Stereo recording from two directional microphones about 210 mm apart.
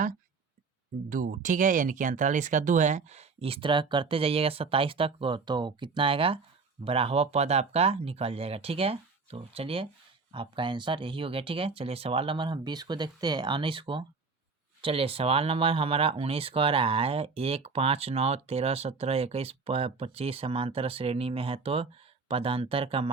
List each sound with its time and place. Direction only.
1.1 s speech: 40° right (ahead or behind)